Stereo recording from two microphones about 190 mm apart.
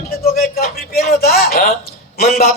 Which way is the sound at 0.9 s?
55° left (ahead or behind).